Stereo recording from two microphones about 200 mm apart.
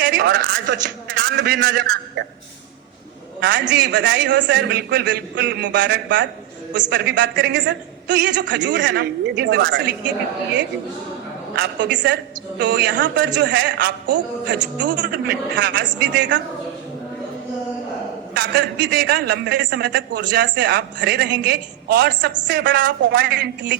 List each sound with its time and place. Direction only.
0.0 s a man's voice: 60° right (ahead or behind)
3.4 s a man's voice: 60° right (ahead or behind)
11.5 s a man's voice: 60° right (ahead or behind)
18.3 s a man's voice: 55° right (ahead or behind)